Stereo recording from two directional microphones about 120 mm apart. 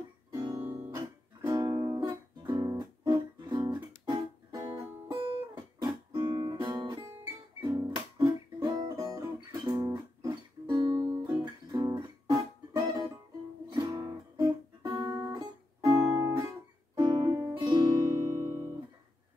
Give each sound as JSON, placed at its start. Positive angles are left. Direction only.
{"t": 0.3, "sound": "guitar", "side_deg": -35}
{"t": 1.5, "sound": "music", "side_deg": -30}
{"t": 2.4, "sound": "guitar", "side_deg": -30}
{"t": 7.6, "sound": "music", "side_deg": -30}
{"t": 10.8, "sound": "music", "side_deg": -45}
{"t": 11.2, "sound": "guitar", "side_deg": -35}
{"t": 14.9, "sound": "guitar", "side_deg": -40}
{"t": 15.3, "sound": "music", "side_deg": -25}